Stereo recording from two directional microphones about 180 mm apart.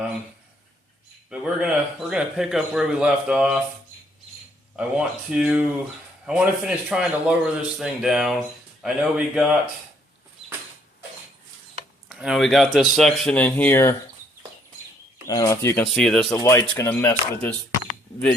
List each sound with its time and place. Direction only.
1.3 s speech: 5° right (ahead or behind)
4.8 s speech: 5° right (ahead or behind)
12.0 s speech: centre (ahead or behind)
15.3 s speech: 15° left (ahead or behind)
15.8 s speech: centre (ahead or behind)
16.3 s speech: 15° left (ahead or behind)